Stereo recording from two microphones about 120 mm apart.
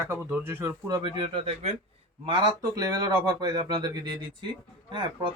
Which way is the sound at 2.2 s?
35° right (ahead or behind).